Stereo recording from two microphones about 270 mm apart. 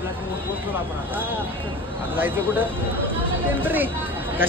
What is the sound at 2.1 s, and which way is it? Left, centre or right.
Speech, centre.